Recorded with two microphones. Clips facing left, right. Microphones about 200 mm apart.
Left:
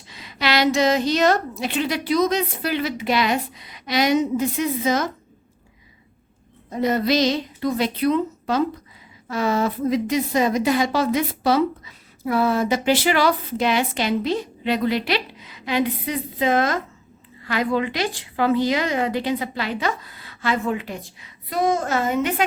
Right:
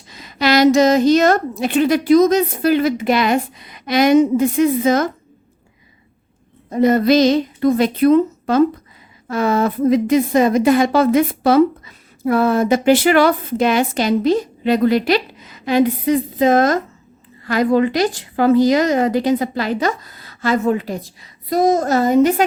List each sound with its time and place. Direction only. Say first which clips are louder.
0.1 s a woman's voice: right 7 dB; 45° right (ahead or behind)
6.7 s a woman's voice: right 7 dB; 50° right (ahead or behind)